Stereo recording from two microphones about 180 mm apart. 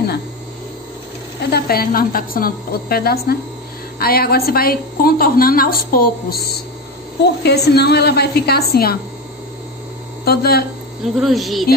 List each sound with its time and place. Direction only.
1.5 s a woman's voice: 55° left (ahead or behind)
10.2 s a woman's voice: 60° left (ahead or behind)
11.1 s speech: centre (ahead or behind)